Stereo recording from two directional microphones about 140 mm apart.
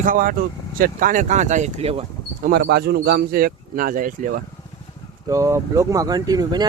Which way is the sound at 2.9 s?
90° right.